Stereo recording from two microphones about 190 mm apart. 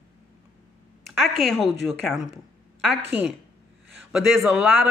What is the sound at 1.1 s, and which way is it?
A man's voice, centre (ahead or behind).